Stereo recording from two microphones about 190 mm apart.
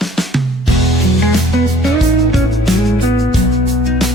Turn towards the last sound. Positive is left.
turn(degrees=0)  # may be behind; listen again after turning